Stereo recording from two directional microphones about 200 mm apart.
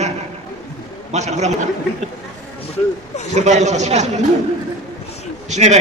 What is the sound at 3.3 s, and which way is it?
Speech, 35° right (ahead or behind).